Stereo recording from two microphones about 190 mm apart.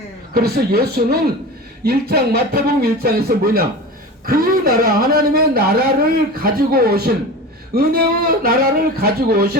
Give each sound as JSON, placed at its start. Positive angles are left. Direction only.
{"t": 0.3, "sound": "a man's voice", "side_deg": -55}